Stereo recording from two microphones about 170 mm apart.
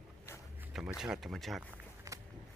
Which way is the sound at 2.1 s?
20° right (ahead or behind).